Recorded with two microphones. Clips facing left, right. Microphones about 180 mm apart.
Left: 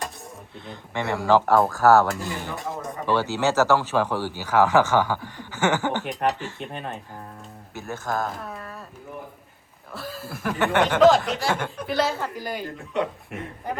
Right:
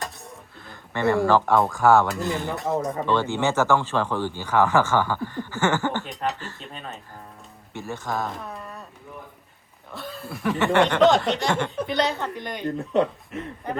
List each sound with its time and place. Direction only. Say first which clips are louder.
0.6 s speech: right 5 dB; 20° left (ahead or behind)
1.5 s speech: left 1 dB; centre (ahead or behind)
6.6 s speech: left 5 dB; 60° left (ahead or behind)
7.7 s speech: left 1 dB; centre (ahead or behind)
9.9 s speech: even; centre (ahead or behind)